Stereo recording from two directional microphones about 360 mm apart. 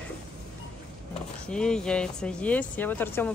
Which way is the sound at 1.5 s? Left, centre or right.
Centre.